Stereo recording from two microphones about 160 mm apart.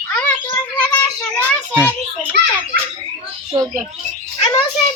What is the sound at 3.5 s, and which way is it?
Bird, 25° right (ahead or behind).